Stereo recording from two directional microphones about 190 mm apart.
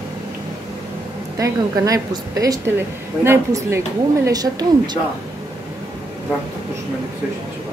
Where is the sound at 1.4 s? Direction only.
20° right (ahead or behind).